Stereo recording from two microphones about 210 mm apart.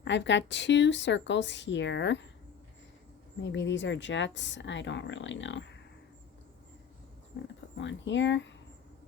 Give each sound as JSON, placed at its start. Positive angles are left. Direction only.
{"t": 0.0, "sound": "speech", "side_deg": 55}
{"t": 3.4, "sound": "speech", "side_deg": 60}
{"t": 7.8, "sound": "speech", "side_deg": 60}